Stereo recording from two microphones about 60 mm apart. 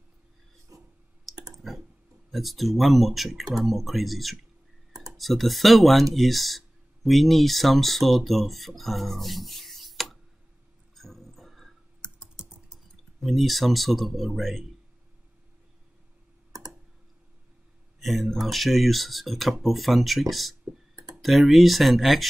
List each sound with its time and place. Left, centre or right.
0.7 s clicking: right
1.3 s clicking: centre
2.3 s speech: centre
11.0 s music: centre
12.4 s typing: centre
13.2 s speech: centre
17.9 s speech: centre